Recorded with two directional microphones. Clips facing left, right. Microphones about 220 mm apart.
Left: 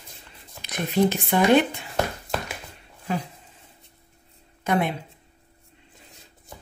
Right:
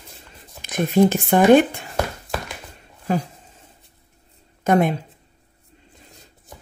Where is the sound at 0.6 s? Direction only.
45° right (ahead or behind).